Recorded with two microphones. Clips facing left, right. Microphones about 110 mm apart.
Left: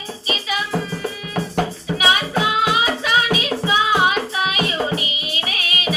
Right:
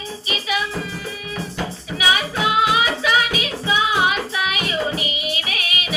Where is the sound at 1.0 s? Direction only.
40° left (ahead or behind).